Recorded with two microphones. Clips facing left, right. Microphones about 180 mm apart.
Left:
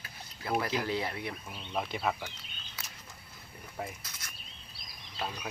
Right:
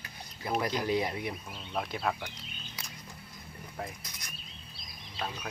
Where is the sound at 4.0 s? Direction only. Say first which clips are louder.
Right 1 dB; 15° right (ahead or behind).